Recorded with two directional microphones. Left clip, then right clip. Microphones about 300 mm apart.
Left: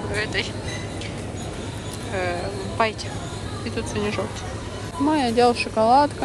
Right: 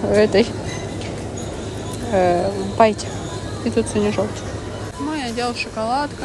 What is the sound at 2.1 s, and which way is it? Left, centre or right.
Speech, centre.